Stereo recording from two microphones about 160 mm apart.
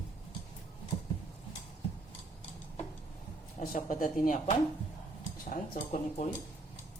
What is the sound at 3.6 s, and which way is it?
Speech, 55° left (ahead or behind).